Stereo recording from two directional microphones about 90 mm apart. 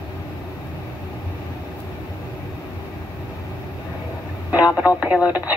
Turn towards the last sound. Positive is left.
turn(degrees=-15)  # may be behind; listen again after turning